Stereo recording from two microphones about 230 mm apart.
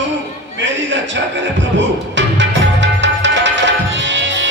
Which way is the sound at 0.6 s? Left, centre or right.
Right.